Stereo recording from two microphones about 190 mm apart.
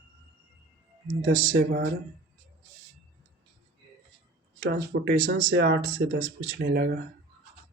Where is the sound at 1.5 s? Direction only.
55° right (ahead or behind).